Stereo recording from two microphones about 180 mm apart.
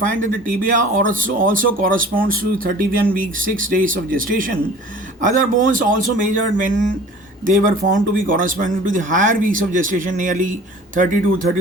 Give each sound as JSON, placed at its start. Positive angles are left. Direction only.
{"t": 0.1, "sound": "speech", "side_deg": -50}